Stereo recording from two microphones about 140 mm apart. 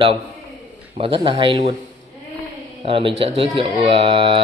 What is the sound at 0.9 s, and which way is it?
Speech, 40° right (ahead or behind).